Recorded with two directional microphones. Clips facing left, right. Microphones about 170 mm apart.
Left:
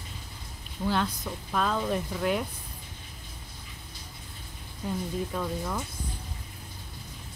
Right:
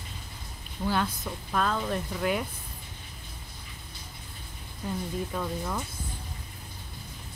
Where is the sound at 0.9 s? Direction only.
Centre (ahead or behind).